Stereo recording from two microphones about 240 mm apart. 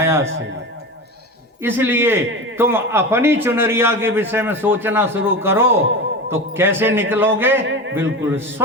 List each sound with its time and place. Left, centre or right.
0.0 s a man's voice: centre
1.6 s a man's voice: centre